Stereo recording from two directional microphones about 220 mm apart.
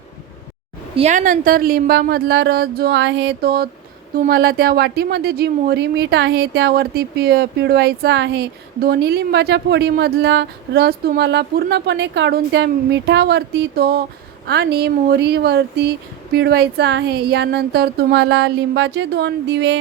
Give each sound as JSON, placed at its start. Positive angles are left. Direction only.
{"t": 0.9, "sound": "speech", "side_deg": -30}